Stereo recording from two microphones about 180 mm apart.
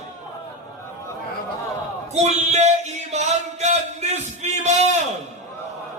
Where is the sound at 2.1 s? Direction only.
40° right (ahead or behind).